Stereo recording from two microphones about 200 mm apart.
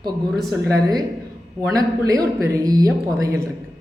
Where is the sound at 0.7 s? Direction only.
20° right (ahead or behind).